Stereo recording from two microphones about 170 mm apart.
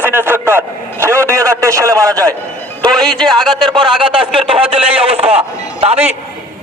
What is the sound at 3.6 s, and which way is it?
Speech, 30° right (ahead or behind).